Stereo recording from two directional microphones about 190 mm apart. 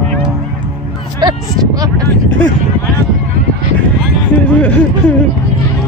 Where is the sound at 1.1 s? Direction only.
20° right (ahead or behind).